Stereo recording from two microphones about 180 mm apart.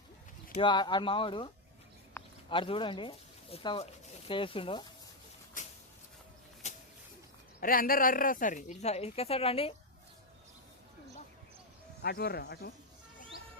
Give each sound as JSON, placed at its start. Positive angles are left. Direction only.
{"t": 0.5, "sound": "speech", "side_deg": 25}
{"t": 2.2, "sound": "a sound", "side_deg": 10}
{"t": 2.5, "sound": "speech", "side_deg": 30}
{"t": 6.6, "sound": "a sound", "side_deg": 40}
{"t": 7.6, "sound": "speech", "side_deg": 50}
{"t": 12.0, "sound": "speech", "side_deg": 60}